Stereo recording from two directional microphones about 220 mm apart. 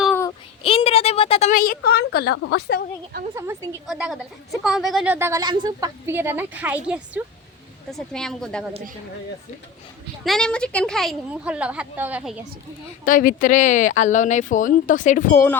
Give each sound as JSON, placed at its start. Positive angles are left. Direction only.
{"t": 0.0, "sound": "a sound", "side_deg": 10}
{"t": 0.6, "sound": "a woman's voice", "side_deg": 25}
{"t": 3.3, "sound": "a woman's voice", "side_deg": -10}
{"t": 3.8, "sound": "a woman's voice", "side_deg": 0}
{"t": 10.2, "sound": "a woman's voice", "side_deg": 5}
{"t": 13.1, "sound": "speech", "side_deg": 40}